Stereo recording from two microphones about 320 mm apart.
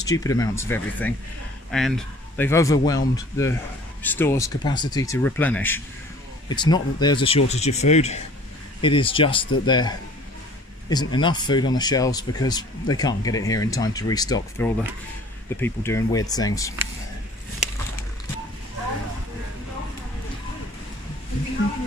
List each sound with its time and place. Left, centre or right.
0.0 s speech: centre